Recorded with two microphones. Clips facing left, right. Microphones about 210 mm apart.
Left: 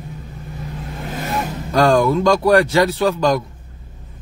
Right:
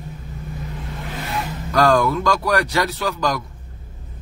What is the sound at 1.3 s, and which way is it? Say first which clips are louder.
Vehicle: left 4 dB; 45° left (ahead or behind).